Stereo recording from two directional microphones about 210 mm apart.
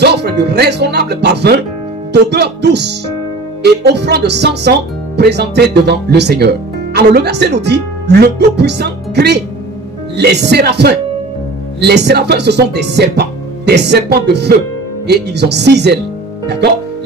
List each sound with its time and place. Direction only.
0.0 s speech: 50° right (ahead or behind)